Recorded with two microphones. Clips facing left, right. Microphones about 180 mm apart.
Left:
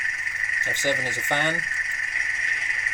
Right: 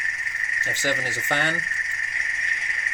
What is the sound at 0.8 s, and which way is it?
Speech, 20° left (ahead or behind).